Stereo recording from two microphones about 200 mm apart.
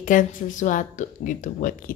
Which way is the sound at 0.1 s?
40° left (ahead or behind).